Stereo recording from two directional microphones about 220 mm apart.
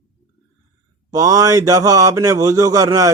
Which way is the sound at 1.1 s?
15° right (ahead or behind).